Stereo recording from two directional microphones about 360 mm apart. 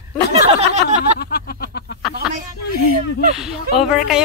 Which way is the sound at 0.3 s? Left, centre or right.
Centre.